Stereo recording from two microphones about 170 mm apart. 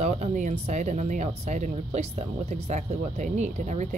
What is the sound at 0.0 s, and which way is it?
Speech, 45° right (ahead or behind).